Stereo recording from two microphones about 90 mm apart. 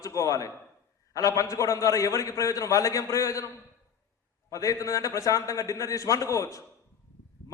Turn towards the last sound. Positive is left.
turn(degrees=35)  # may be behind; listen again after turning